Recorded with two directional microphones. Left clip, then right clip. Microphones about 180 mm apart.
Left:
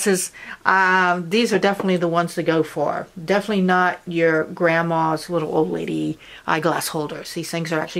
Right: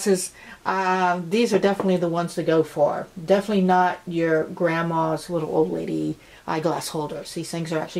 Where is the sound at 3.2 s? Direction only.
20° left (ahead or behind).